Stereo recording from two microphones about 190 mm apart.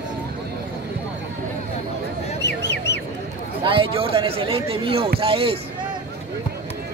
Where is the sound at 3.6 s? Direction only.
30° right (ahead or behind).